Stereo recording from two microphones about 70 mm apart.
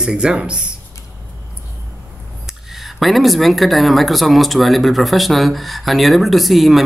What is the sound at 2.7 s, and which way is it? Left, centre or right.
Speech, centre.